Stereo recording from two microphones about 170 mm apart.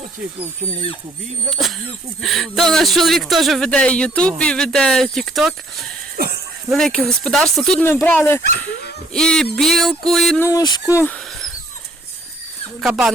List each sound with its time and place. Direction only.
0.3 s speech: 35° right (ahead or behind)
1.5 s a man's voice: centre (ahead or behind)
10.4 s speech: 20° left (ahead or behind)
10.9 s dog: 10° left (ahead or behind)
12.9 s a man's voice: 5° right (ahead or behind)